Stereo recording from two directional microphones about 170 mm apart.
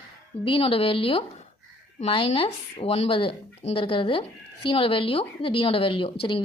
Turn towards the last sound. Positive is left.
turn(degrees=30)  # may be behind; listen again after turning